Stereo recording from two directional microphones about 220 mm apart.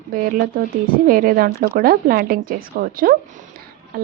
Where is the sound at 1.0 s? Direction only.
40° right (ahead or behind).